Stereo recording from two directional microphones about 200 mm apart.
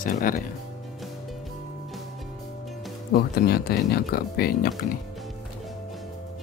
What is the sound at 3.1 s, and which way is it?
Speech, 50° left (ahead or behind).